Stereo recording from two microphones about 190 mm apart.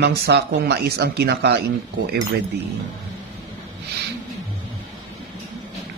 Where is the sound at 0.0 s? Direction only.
60° right (ahead or behind).